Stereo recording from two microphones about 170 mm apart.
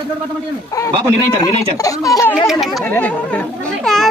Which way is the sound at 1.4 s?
20° left (ahead or behind).